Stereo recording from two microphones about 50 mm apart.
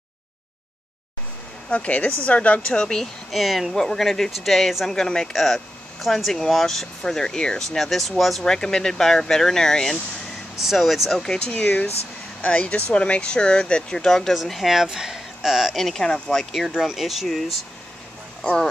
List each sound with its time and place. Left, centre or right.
1.7 s speech: left
2.8 s speech: centre
3.3 s speech: centre
8.5 s speech: centre
10.6 s speech: centre
11.3 s speech: left; by 14.3 s centre
14.3 s speech: centre
15.7 s speech: centre
16.6 s speech: centre
18.4 s speech: centre